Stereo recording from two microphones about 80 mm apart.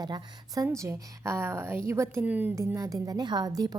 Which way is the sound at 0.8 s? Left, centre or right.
Right.